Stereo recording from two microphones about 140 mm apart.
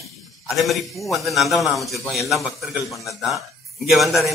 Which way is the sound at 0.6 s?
Centre (ahead or behind).